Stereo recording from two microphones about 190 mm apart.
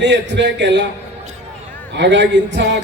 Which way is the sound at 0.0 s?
65° right (ahead or behind).